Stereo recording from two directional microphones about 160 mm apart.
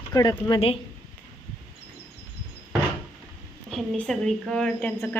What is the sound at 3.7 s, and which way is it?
Speech, centre (ahead or behind).